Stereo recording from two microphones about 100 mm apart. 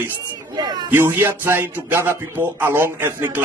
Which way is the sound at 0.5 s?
45° right (ahead or behind).